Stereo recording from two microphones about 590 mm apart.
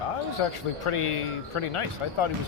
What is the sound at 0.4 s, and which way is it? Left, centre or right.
Speech, left.